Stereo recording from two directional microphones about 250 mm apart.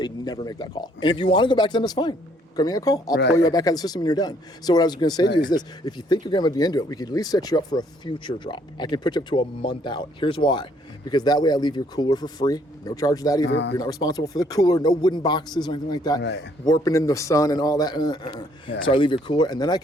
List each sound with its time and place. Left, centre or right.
0.0 s speech: centre
3.1 s speech: left
3.3 s speech: centre
13.5 s speech: left
13.7 s speech: centre
16.2 s speech: left
16.6 s speech: centre